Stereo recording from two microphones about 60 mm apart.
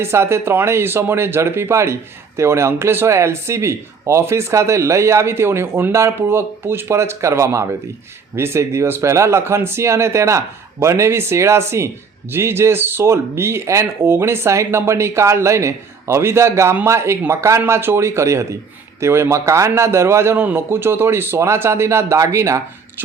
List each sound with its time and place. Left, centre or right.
0.0 s speech: right
20.4 s speech: right